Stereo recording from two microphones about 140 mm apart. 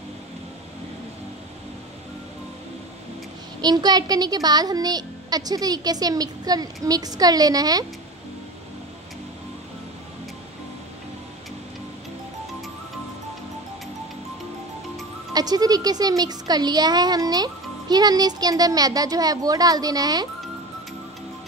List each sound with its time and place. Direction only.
3.6 s speech: 30° right (ahead or behind)
15.3 s speech: 30° right (ahead or behind)